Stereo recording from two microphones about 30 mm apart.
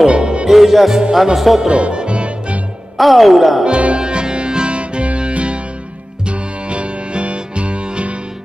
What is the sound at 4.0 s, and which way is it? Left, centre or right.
Music, right.